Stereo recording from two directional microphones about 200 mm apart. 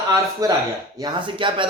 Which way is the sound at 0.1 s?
20° right (ahead or behind).